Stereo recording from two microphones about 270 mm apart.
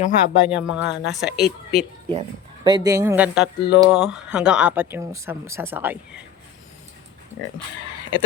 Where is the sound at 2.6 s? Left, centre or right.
Centre.